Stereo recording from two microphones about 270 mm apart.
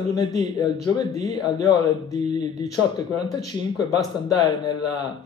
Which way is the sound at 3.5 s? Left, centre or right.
Centre.